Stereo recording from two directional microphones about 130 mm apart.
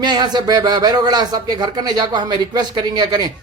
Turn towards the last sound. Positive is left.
turn(degrees=-30)  # may be behind; listen again after turning